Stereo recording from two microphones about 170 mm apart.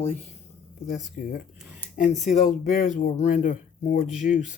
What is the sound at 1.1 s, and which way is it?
Speech, 55° left (ahead or behind).